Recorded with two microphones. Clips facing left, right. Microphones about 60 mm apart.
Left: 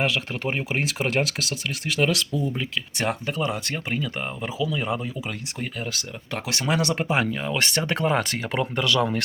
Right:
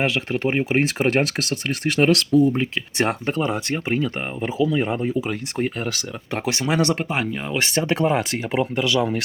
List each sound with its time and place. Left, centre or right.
0.0 s speech: right
0.7 s speech: right
2.6 s speech: right
6.9 s speech: centre
7.3 s speech: centre